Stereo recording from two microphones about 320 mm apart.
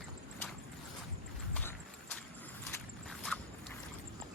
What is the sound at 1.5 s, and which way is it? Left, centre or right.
Horse, centre.